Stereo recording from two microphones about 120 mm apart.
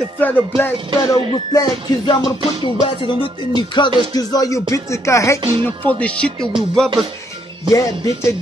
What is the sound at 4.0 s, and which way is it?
Speech, 35° left (ahead or behind).